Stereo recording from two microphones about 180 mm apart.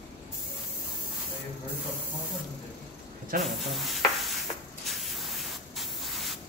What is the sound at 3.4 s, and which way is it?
Speech, centre (ahead or behind).